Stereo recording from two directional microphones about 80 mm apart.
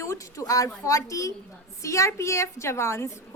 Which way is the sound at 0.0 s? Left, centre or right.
Left.